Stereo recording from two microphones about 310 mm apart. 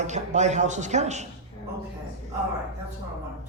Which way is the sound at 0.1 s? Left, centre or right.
Right.